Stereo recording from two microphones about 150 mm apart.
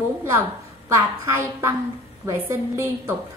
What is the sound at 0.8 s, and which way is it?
A woman's voice, 20° right (ahead or behind).